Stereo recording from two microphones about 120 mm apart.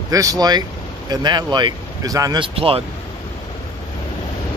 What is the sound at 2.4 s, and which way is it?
Speech, 50° right (ahead or behind).